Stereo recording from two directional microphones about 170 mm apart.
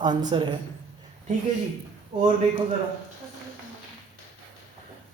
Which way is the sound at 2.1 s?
30° right (ahead or behind).